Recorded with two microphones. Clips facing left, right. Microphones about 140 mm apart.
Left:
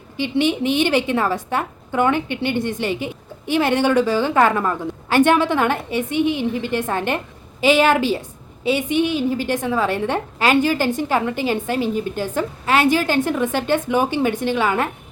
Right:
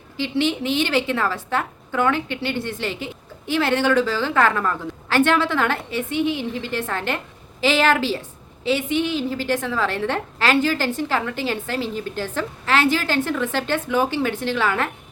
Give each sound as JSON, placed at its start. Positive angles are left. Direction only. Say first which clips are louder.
{"t": 0.2, "sound": "a woman's voice", "louder": "left 3 dB", "side_deg": 15}